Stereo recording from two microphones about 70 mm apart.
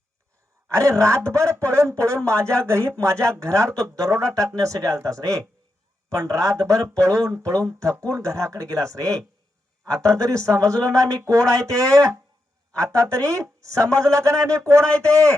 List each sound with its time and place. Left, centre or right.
0.7 s speech: right